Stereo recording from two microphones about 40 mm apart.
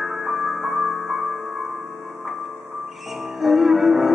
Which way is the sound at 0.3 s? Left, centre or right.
Centre.